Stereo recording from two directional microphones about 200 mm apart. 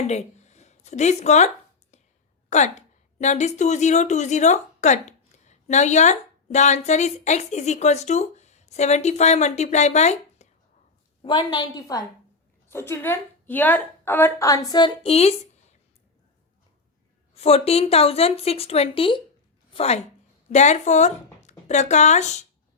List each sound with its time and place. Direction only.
0.1 s a woman's voice: 35° left (ahead or behind)
2.5 s a woman's voice: 35° left (ahead or behind)
17.4 s a woman's voice: 30° left (ahead or behind)